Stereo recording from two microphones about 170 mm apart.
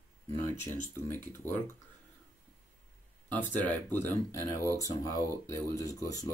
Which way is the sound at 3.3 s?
10° left (ahead or behind).